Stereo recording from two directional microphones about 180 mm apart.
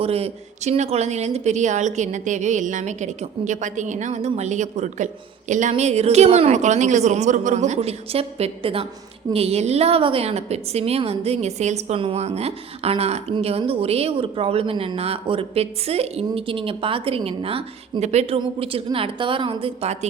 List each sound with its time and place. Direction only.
0.0 s a woman's voice: 35° right (ahead or behind)